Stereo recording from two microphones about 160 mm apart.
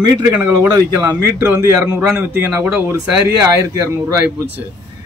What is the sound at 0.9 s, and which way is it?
A man's voice, 15° right (ahead or behind).